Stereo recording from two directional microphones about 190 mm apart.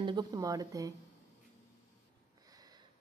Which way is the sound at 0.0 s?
20° right (ahead or behind).